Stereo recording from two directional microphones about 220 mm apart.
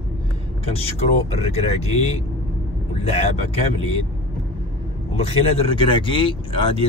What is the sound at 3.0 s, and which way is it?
Speech, 25° left (ahead or behind).